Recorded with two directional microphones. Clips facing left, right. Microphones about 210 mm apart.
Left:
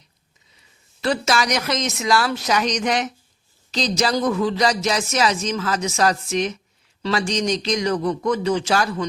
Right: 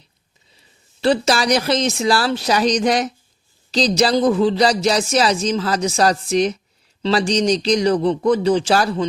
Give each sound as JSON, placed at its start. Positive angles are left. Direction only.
{"t": 1.0, "sound": "speech", "side_deg": -30}